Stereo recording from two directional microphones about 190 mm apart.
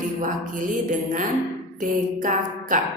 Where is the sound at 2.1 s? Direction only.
45° right (ahead or behind).